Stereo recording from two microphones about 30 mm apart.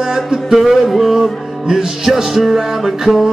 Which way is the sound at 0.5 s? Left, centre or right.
Centre.